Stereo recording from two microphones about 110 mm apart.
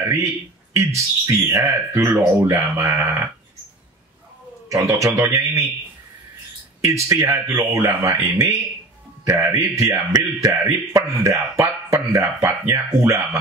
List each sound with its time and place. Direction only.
0.7 s a man's voice: 25° right (ahead or behind)
4.6 s a man's voice: 30° right (ahead or behind)
6.8 s a man's voice: 25° right (ahead or behind)